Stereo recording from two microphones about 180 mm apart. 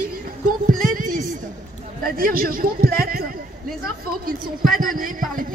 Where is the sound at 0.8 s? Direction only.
50° right (ahead or behind).